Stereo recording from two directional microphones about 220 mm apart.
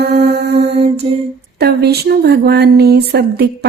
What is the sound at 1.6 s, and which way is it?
Speech, 45° right (ahead or behind).